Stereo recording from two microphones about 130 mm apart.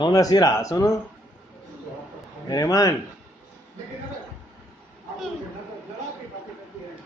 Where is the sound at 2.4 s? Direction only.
30° left (ahead or behind).